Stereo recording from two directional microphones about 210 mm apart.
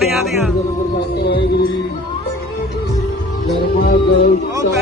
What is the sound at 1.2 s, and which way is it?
Music, 50° left (ahead or behind).